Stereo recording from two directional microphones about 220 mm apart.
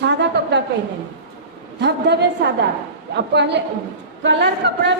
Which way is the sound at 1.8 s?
50° right (ahead or behind).